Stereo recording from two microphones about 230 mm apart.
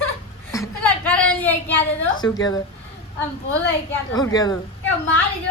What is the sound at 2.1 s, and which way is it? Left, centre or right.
Speech, centre.